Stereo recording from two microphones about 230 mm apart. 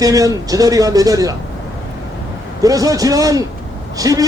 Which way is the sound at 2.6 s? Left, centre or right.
Centre.